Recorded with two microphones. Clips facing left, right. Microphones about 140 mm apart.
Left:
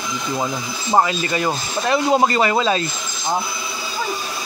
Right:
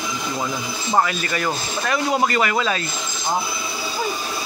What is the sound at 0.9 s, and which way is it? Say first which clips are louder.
Speech: left 3 dB; 20° left (ahead or behind).